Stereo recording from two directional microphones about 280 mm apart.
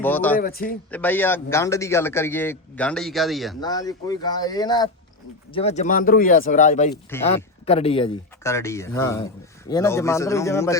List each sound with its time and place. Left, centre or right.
0.0 s speech: centre
0.3 s speech: left
0.9 s speech: centre
3.6 s speech: centre